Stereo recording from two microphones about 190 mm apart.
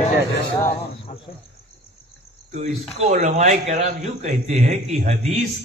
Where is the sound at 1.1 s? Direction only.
40° left (ahead or behind).